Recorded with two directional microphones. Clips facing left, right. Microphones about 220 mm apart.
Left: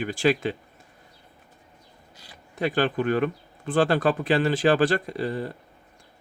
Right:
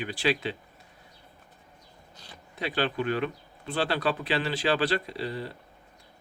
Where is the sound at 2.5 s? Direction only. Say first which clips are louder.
Left 5 dB; 50° left (ahead or behind).